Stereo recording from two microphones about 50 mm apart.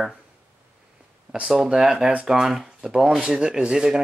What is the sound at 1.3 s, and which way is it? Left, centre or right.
Speech, centre.